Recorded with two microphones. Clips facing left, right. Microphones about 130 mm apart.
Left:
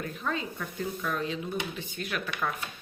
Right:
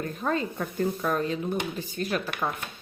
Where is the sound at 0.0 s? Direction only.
45° right (ahead or behind).